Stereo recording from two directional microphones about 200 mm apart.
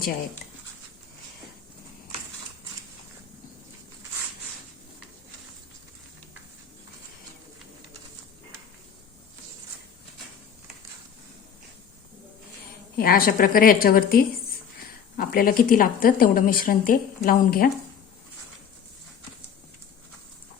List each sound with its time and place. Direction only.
13.0 s a woman's voice: 45° left (ahead or behind)